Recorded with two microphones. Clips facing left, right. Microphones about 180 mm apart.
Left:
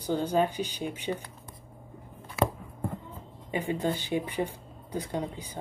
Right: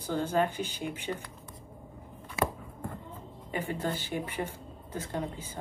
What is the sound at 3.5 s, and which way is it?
Speech, 15° left (ahead or behind).